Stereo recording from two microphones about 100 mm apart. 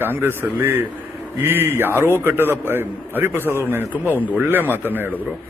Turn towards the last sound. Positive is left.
turn(degrees=-20)  # may be behind; listen again after turning